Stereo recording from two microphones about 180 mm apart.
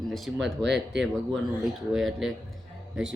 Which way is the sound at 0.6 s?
75° right (ahead or behind).